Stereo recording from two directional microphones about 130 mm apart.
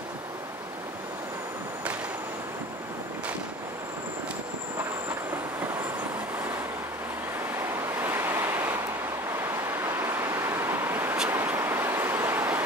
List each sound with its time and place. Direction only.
7.5 s waves: 20° right (ahead or behind)
9.4 s vehicle: 15° right (ahead or behind)